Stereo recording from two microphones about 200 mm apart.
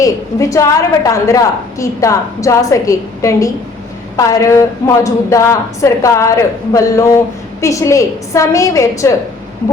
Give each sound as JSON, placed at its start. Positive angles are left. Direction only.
{"t": 0.0, "sound": "a woman's voice", "side_deg": 15}